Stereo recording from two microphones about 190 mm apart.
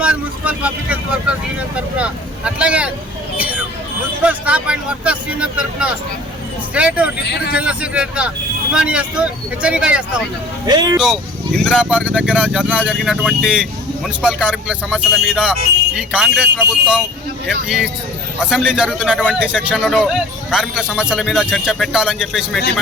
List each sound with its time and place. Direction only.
0.0 s speech: 5° right (ahead or behind)
3.3 s vehicle: 10° right (ahead or behind)
4.2 s speech: 5° right (ahead or behind)
10.7 s speech: 20° right (ahead or behind)
10.9 s speech: centre (ahead or behind)
18.4 s speech: 5° right (ahead or behind)